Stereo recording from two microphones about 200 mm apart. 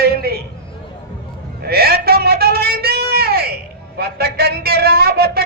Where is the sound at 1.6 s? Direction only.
50° right (ahead or behind).